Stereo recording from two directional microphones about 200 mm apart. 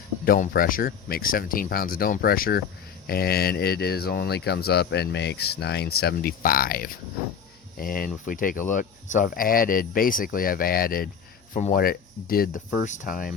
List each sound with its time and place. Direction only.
0.3 s speech: 45° left (ahead or behind)